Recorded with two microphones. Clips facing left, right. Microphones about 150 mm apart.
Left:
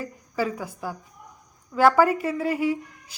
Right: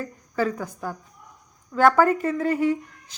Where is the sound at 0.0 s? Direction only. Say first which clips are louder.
Right 2 dB; 10° left (ahead or behind).